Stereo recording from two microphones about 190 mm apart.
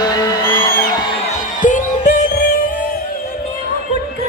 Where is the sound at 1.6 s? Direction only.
40° left (ahead or behind).